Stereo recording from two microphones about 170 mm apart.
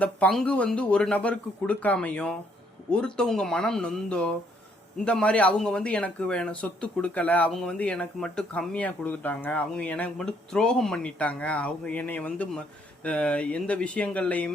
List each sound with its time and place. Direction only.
0.0 s speech: 5° left (ahead or behind)